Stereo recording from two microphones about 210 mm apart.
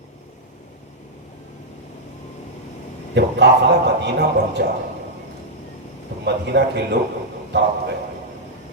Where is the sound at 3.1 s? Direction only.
55° right (ahead or behind).